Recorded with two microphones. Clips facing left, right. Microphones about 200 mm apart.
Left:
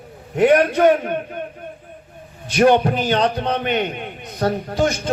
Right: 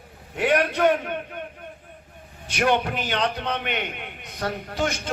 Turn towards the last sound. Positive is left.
turn(degrees=40)  # may be behind; listen again after turning